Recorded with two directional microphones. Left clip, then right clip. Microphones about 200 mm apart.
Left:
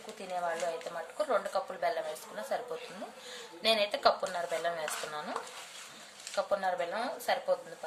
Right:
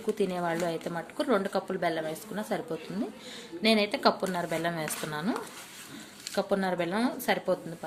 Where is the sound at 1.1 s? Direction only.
35° right (ahead or behind).